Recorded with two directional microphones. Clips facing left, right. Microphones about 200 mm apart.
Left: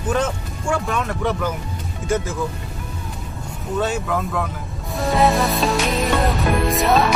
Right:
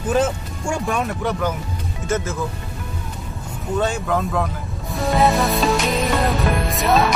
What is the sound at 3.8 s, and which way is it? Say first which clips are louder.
Speech: right 1 dB; 5° left (ahead or behind).